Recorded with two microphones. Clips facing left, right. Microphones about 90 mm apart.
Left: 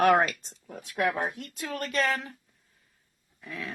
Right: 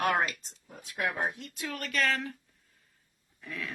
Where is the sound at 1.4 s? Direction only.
45° left (ahead or behind); by 2.3 s 20° left (ahead or behind).